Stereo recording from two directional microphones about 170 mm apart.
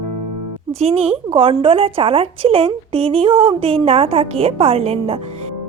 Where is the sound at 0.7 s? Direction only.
35° right (ahead or behind).